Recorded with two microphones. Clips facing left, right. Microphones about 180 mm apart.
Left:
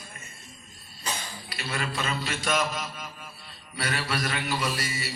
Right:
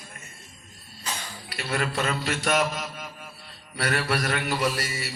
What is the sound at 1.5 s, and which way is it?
Mantra, 55° right (ahead or behind).